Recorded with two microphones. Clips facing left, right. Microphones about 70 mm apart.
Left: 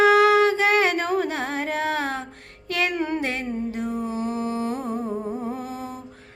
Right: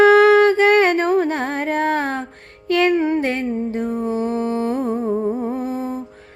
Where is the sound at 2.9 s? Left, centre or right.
Right.